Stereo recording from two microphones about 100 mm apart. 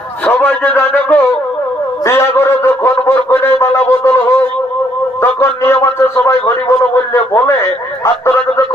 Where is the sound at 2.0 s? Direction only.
25° left (ahead or behind).